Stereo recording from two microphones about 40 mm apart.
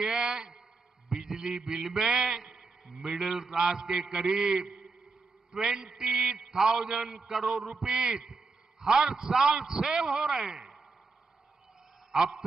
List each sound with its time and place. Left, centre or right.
0.0 s a man's voice: centre
12.1 s a man's voice: centre